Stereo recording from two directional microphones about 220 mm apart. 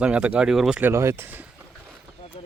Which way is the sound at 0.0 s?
5° right (ahead or behind).